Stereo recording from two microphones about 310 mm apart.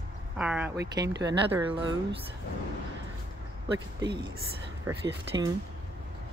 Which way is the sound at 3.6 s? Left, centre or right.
Centre.